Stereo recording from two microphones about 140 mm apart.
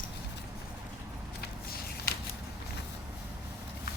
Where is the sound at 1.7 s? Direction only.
90° left.